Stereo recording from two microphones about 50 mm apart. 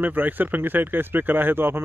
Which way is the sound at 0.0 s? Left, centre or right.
Right.